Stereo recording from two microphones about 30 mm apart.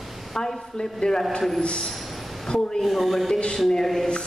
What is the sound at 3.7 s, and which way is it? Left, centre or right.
Speech, centre.